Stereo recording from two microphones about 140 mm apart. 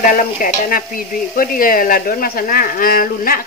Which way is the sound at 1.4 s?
90° left.